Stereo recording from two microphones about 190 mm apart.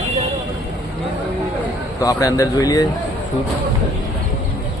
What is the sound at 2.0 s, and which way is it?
Speech, 15° left (ahead or behind).